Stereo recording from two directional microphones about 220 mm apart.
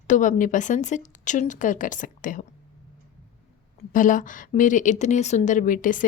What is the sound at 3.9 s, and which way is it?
A woman's voice, 35° left (ahead or behind).